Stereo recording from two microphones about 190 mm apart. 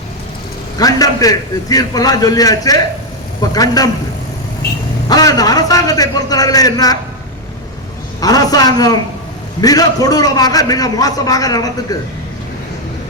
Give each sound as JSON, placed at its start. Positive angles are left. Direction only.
{"t": 0.8, "sound": "a man's voice", "side_deg": 20}
{"t": 5.0, "sound": "a man's voice", "side_deg": 20}
{"t": 8.2, "sound": "a man's voice", "side_deg": 20}